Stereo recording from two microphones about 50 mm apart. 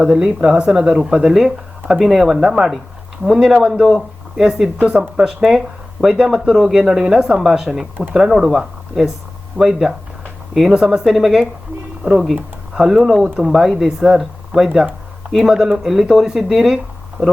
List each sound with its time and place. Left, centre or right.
0.0 s speech: centre
0.9 s speech: centre